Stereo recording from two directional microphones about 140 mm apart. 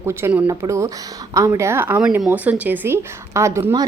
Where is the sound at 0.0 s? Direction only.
15° right (ahead or behind).